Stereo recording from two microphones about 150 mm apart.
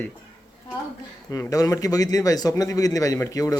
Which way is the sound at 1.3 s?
20° left (ahead or behind).